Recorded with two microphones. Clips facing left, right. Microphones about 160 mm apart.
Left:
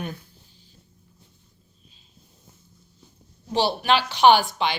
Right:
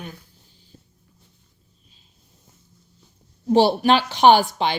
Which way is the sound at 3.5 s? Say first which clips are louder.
Right 6 dB; 45° right (ahead or behind).